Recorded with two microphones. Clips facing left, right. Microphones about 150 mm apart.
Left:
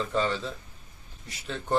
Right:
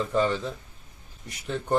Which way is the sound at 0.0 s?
10° right (ahead or behind).